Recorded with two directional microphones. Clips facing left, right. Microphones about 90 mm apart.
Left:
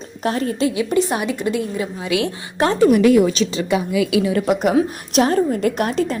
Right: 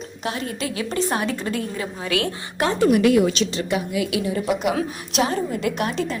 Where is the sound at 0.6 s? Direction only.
20° left (ahead or behind).